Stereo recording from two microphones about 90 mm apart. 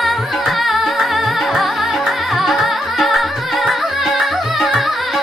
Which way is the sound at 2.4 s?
Centre (ahead or behind).